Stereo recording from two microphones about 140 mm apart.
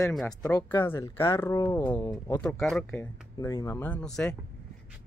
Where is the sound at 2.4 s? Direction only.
5° left (ahead or behind).